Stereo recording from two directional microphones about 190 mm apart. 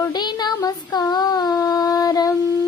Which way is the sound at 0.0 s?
20° left (ahead or behind).